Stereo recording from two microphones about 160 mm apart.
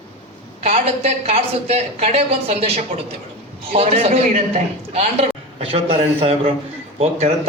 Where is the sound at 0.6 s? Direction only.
40° right (ahead or behind).